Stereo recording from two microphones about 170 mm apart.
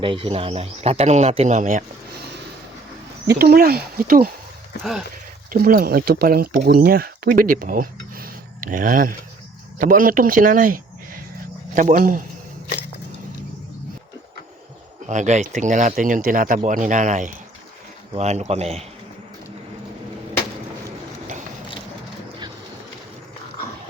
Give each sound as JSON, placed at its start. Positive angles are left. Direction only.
{"t": 0.0, "sound": "speech", "side_deg": -30}
{"t": 3.2, "sound": "speech", "side_deg": -65}
{"t": 4.8, "sound": "a sound", "side_deg": 0}
{"t": 5.5, "sound": "speech", "side_deg": -55}
{"t": 15.0, "sound": "speech", "side_deg": -45}